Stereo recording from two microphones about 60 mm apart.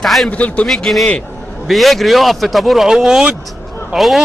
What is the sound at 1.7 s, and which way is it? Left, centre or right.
A man's voice, centre.